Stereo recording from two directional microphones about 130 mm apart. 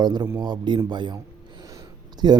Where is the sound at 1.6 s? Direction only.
30° right (ahead or behind).